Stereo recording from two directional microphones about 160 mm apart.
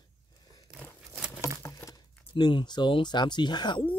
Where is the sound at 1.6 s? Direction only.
20° left (ahead or behind).